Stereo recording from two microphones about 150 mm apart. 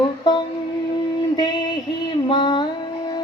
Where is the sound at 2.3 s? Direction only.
30° left (ahead or behind).